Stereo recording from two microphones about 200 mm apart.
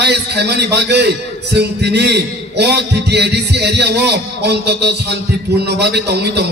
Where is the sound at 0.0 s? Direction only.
55° right (ahead or behind).